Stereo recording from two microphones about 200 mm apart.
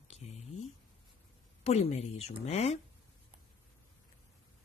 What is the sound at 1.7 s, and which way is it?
Speech, 30° left (ahead or behind).